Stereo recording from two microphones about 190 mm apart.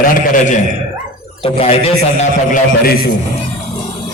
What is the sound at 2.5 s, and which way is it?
Speech, 50° left (ahead or behind).